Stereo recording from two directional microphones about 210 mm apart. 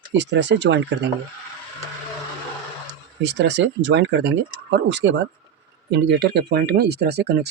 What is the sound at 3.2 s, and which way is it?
Speech, 55° right (ahead or behind).